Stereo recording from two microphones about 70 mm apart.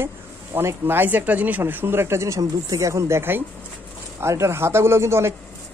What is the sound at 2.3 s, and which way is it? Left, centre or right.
Speech, right.